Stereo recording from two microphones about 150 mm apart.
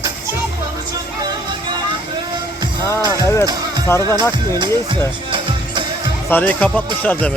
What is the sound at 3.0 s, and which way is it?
Music, 25° right (ahead or behind).